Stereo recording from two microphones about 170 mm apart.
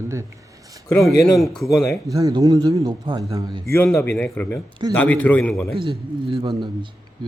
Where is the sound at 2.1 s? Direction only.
20° right (ahead or behind).